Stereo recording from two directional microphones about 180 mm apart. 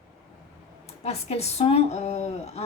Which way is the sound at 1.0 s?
35° left (ahead or behind).